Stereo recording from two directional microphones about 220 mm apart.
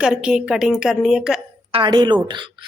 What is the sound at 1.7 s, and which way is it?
Speech, 20° right (ahead or behind).